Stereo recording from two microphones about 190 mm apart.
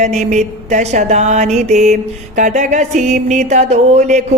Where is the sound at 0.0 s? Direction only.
35° right (ahead or behind).